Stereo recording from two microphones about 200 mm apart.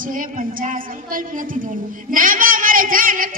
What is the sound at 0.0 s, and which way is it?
A woman's voice, 40° right (ahead or behind).